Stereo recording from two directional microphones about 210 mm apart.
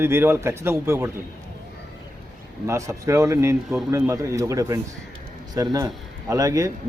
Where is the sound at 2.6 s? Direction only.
15° right (ahead or behind).